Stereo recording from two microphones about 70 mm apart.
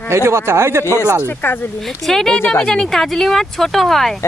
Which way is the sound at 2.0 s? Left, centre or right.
Centre.